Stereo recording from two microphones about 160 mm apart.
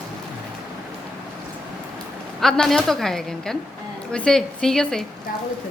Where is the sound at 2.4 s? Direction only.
5° left (ahead or behind).